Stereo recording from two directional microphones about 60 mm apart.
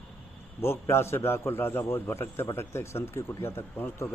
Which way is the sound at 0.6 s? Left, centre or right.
Left.